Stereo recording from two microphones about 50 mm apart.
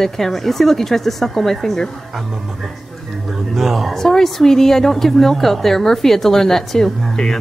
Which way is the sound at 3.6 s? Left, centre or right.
Centre.